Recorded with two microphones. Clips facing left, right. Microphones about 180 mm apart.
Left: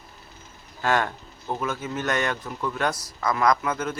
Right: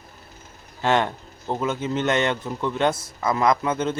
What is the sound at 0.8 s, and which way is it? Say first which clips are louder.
Speech: right 3 dB; 20° right (ahead or behind).